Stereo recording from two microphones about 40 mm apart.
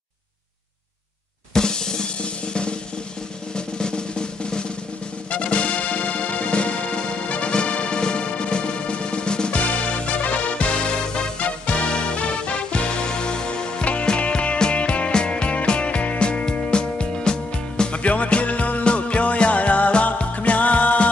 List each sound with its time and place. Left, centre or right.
1.5 s drum kit: centre
3.5 s drum: left
5.3 s music: left
9.6 s music: left
18.0 s music: left